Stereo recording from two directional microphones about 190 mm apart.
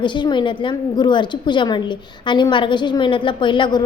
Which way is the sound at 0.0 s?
25° left (ahead or behind).